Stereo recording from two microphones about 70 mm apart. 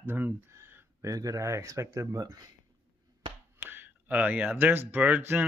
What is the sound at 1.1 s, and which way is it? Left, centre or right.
Speech, right.